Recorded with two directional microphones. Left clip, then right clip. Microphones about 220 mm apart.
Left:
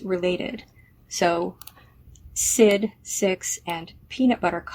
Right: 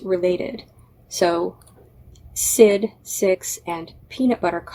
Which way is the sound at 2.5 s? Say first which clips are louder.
Right 4 dB; 30° left (ahead or behind).